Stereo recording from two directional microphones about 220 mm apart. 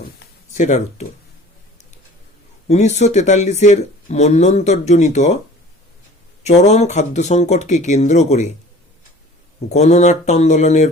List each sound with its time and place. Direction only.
0.5 s speech: 35° left (ahead or behind)
2.6 s speech: 30° left (ahead or behind)
6.4 s speech: 30° left (ahead or behind)
9.6 s speech: 30° left (ahead or behind)